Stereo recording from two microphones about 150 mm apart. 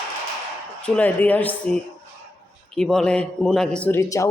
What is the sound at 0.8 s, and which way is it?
A man's voice, 10° left (ahead or behind).